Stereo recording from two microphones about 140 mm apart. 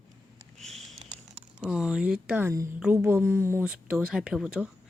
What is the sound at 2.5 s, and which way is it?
A woman's voice, 20° right (ahead or behind).